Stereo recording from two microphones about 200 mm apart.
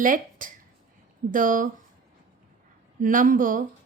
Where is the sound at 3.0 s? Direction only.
40° right (ahead or behind).